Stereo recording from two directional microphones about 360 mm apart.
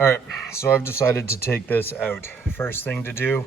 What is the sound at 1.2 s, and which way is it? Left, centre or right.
Speech, left.